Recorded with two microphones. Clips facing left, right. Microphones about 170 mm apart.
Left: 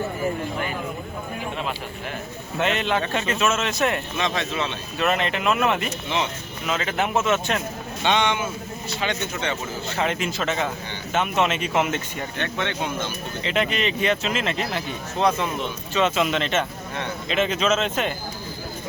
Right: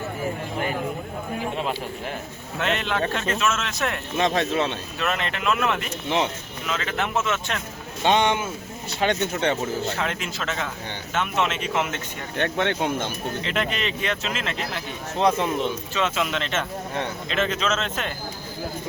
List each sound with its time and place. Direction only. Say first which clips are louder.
2.6 s speech: left 2 dB; centre (ahead or behind)
4.2 s speech: right 7 dB; 45° right (ahead or behind)
4.9 s speech: left 6 dB; 5° left (ahead or behind)
8.0 s speech: right 2 dB; 40° right (ahead or behind)
10.0 s speech: left 4 dB; 5° left (ahead or behind)
12.4 s speech: right 5 dB; 50° right (ahead or behind)
13.4 s speech: left 5 dB; centre (ahead or behind)
16.0 s speech: left 5 dB; centre (ahead or behind)